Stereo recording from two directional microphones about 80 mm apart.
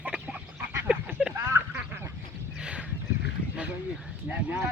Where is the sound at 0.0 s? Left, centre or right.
Centre.